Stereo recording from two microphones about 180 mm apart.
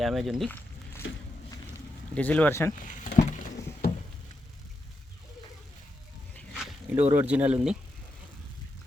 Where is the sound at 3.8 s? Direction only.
65° left (ahead or behind).